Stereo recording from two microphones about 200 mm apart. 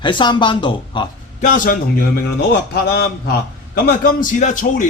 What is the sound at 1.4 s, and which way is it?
Speech, 40° left (ahead or behind).